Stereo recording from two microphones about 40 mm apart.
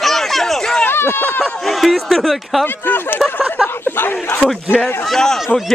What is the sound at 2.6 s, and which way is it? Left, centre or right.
Speech, left.